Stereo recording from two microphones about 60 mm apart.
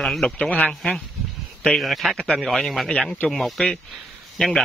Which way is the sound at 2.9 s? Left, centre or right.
Left.